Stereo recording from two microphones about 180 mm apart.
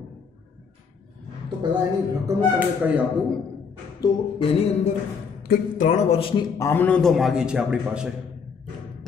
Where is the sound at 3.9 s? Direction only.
25° left (ahead or behind).